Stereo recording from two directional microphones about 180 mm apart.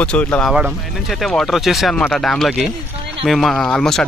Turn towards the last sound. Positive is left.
turn(degrees=5)  # may be behind; listen again after turning